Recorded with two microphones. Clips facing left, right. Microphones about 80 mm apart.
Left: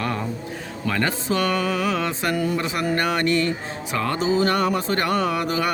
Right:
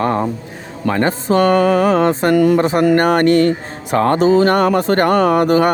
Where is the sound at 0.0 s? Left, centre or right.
Right.